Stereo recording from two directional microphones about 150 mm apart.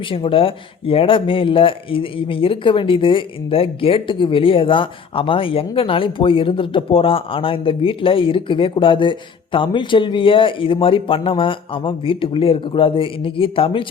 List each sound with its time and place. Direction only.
0.1 s speech: 35° left (ahead or behind)